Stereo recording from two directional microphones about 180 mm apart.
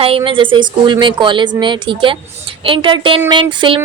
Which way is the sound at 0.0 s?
30° right (ahead or behind).